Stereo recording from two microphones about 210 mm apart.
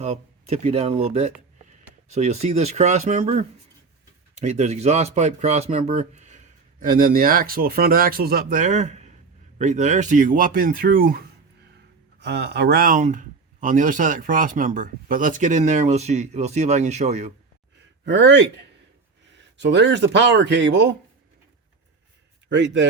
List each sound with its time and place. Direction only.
0.0 s speech: 30° right (ahead or behind)
12.2 s speech: 55° right (ahead or behind); by 17.3 s 30° right (ahead or behind)
18.0 s a man's voice: 55° right (ahead or behind)
19.5 s speech: 60° right (ahead or behind)
22.5 s speech: 60° right (ahead or behind)